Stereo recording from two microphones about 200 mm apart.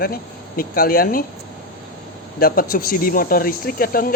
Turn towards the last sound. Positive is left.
turn(degrees=45)  # may be behind; listen again after turning